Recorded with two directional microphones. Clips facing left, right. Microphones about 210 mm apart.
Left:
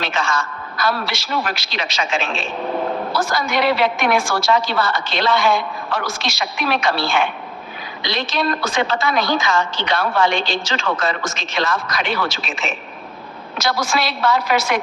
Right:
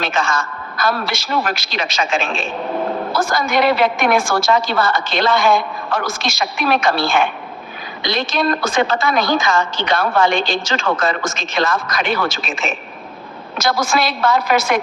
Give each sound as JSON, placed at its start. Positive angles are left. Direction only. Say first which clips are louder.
{"t": 0.0, "sound": "a woman's voice", "louder": "right 2 dB", "side_deg": -50}